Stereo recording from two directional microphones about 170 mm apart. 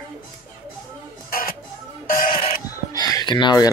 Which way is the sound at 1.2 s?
55° left (ahead or behind).